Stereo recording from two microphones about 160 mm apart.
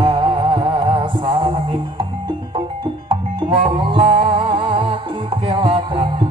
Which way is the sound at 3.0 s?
35° right (ahead or behind).